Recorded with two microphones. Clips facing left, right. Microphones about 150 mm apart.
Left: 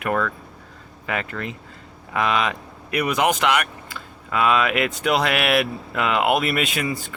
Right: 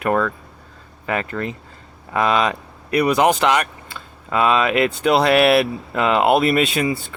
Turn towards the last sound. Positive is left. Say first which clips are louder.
# right 5 dB
turn(degrees=-30)  # may be behind; listen again after turning